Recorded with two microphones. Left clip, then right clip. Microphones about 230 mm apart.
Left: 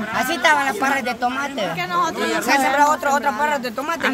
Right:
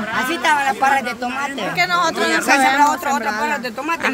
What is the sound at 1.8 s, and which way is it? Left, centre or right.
Speech, right.